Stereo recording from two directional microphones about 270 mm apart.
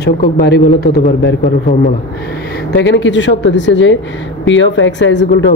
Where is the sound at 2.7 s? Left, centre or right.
Left.